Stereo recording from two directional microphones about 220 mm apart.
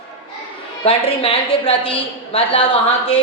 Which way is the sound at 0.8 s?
25° left (ahead or behind).